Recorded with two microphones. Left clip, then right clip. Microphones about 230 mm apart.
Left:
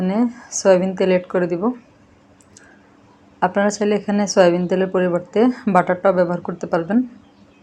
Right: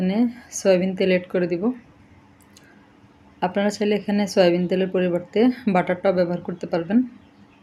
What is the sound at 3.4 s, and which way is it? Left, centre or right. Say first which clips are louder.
A woman's voice: left 5 dB; centre.